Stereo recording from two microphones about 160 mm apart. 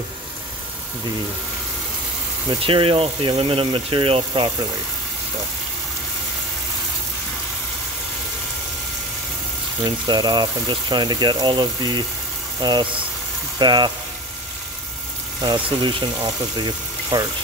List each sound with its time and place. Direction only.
2.6 s speech: 35° right (ahead or behind)
9.8 s speech: 25° right (ahead or behind)
15.4 s speech: 30° right (ahead or behind)